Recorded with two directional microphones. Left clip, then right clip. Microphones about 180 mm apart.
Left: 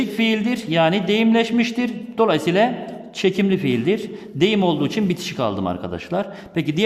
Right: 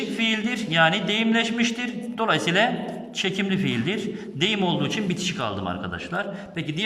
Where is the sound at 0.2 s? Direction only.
25° left (ahead or behind).